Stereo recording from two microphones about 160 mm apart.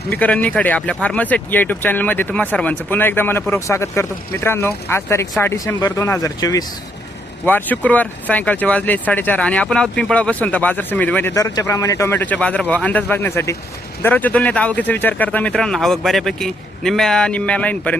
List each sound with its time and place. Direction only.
0.1 s speech: 10° left (ahead or behind)
7.4 s speech: 10° left (ahead or behind)